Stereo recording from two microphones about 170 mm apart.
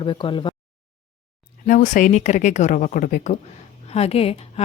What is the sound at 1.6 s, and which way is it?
Speech, 50° left (ahead or behind).